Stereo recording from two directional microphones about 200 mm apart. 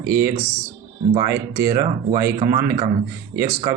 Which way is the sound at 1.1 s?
15° right (ahead or behind).